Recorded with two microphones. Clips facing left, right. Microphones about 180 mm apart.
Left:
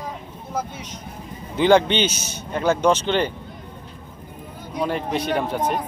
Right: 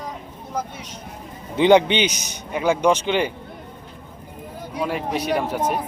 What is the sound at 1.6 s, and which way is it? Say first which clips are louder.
Speech: right 1 dB; 20° right (ahead or behind).